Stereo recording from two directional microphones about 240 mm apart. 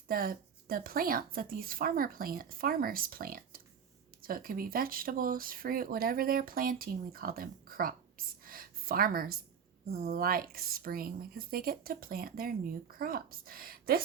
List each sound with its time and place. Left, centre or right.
0.1 s a woman's voice: right